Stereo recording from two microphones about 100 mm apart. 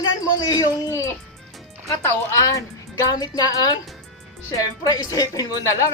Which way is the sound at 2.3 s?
35° left (ahead or behind).